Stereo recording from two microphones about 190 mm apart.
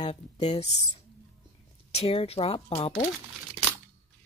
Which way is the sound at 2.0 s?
30° left (ahead or behind).